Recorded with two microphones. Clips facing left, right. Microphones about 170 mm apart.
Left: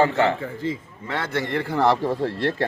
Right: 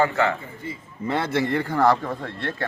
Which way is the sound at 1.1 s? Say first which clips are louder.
Right 2 dB; 5° right (ahead or behind).